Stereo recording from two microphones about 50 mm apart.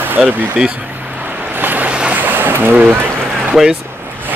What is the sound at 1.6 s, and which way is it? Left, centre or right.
Boat, right.